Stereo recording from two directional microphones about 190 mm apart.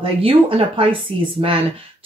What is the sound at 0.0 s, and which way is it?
Speech, 30° right (ahead or behind).